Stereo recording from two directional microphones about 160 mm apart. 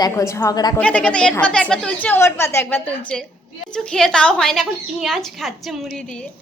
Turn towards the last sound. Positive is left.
turn(degrees=5)  # may be behind; listen again after turning